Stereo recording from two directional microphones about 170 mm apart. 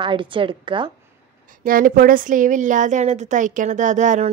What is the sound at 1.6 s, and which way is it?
A woman's voice, 55° right (ahead or behind).